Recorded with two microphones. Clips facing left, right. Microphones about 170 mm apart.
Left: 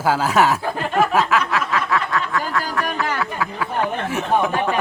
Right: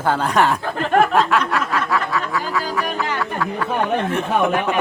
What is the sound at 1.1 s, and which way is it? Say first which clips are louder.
Snicker: right 1 dB; 5° left (ahead or behind).